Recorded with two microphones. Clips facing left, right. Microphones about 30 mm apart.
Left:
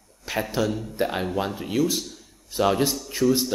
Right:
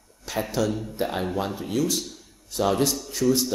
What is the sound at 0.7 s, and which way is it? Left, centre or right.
A man's voice, centre.